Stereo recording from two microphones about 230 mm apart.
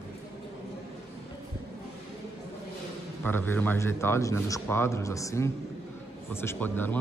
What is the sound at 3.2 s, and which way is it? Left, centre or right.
A man's voice, centre.